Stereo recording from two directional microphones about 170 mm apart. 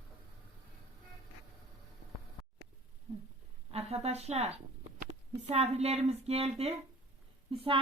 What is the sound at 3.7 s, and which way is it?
A woman's voice, 40° right (ahead or behind).